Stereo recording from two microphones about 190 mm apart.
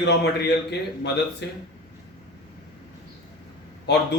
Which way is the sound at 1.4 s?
65° left (ahead or behind).